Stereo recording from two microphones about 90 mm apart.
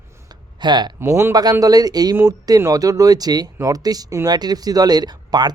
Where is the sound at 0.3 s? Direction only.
55° right (ahead or behind).